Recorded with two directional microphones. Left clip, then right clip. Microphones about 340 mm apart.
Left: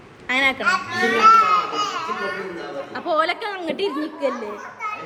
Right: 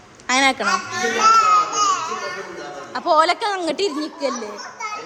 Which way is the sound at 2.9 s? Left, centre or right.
Centre.